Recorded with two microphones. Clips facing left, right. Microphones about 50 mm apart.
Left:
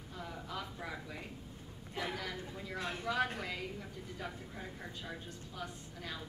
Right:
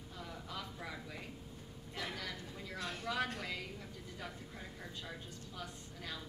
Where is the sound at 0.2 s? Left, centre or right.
Centre.